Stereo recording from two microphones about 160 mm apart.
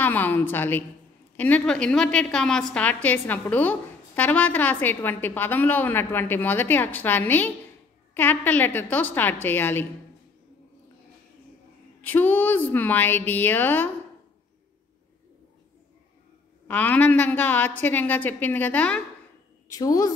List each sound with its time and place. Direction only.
0.0 s a woman's voice: 10° left (ahead or behind)
12.0 s a woman's voice: 10° left (ahead or behind)
16.6 s a woman's voice: 10° left (ahead or behind)
19.7 s a woman's voice: 20° left (ahead or behind)